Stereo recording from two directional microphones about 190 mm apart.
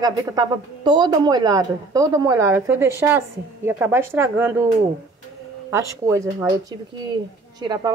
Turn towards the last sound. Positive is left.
turn(degrees=-20)  # may be behind; listen again after turning